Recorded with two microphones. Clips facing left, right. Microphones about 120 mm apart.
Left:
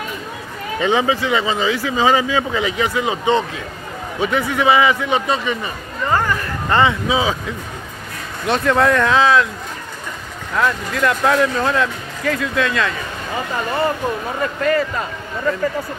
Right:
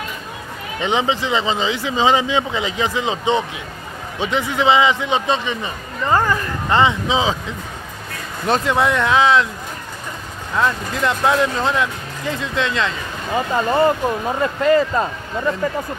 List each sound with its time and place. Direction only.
0.7 s speech: 20° right (ahead or behind)
8.6 s speech: 20° right (ahead or behind)
10.5 s speech: 20° right (ahead or behind)